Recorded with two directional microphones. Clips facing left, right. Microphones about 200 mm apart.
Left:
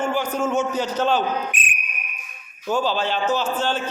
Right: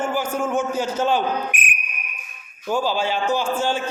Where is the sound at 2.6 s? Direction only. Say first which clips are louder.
Even; 10° right (ahead or behind).